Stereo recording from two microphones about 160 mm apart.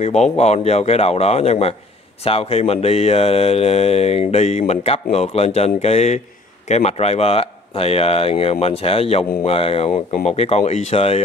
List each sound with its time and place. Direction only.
0.0 s speech: 45° left (ahead or behind)